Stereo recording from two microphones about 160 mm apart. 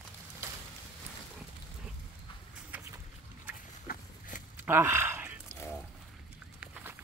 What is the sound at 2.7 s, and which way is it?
Boat, 10° right (ahead or behind).